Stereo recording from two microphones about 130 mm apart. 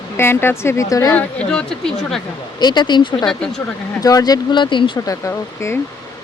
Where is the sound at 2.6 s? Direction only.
35° left (ahead or behind).